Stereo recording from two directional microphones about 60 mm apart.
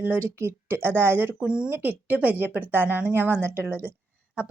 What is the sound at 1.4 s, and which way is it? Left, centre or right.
Speech, centre.